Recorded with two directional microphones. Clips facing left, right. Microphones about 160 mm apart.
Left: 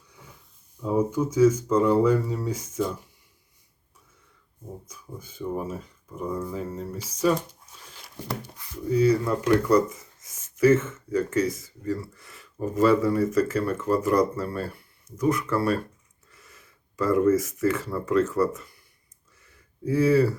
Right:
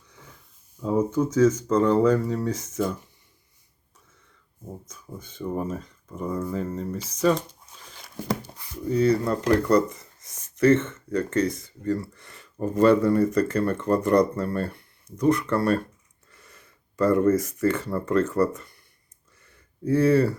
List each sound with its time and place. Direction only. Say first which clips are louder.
0.9 s speech: right 1 dB; 10° left (ahead or behind)
4.9 s speech: even; 10° left (ahead or behind)
9.2 s speech: even; 35° right (ahead or behind)
9.6 s speech: even; 5° left (ahead or behind)
19.4 s a sound: right 1 dB; centre (ahead or behind)